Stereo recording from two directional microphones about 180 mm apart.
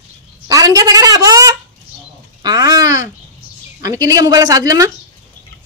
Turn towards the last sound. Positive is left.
turn(degrees=-20)  # may be behind; listen again after turning